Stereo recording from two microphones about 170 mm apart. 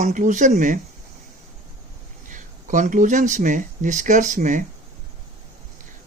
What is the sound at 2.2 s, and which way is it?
Speech, 50° right (ahead or behind).